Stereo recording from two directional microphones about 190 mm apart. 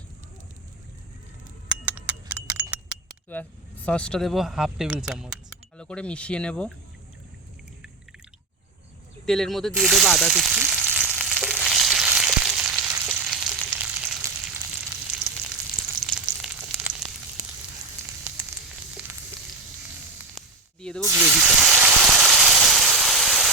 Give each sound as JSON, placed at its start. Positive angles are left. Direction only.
{"t": 1.6, "sound": "a sound", "side_deg": -5}
{"t": 3.4, "sound": "speech", "side_deg": 10}
{"t": 9.2, "sound": "sizzle", "side_deg": 0}
{"t": 16.0, "sound": "frying", "side_deg": -5}
{"t": 17.4, "sound": "frying", "side_deg": -40}
{"t": 21.0, "sound": "a sound", "side_deg": -10}